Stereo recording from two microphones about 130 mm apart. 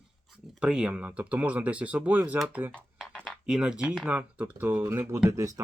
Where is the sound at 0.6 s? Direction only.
5° right (ahead or behind).